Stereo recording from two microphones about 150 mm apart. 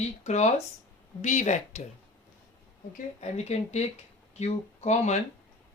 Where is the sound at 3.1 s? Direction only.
50° left (ahead or behind).